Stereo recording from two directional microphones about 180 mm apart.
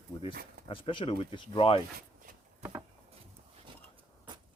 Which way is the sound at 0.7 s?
30° left (ahead or behind).